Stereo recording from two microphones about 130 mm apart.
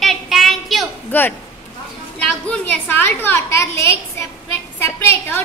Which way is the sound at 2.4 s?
10° left (ahead or behind).